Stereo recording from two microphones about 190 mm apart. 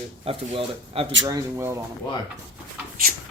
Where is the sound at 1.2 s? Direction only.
15° right (ahead or behind).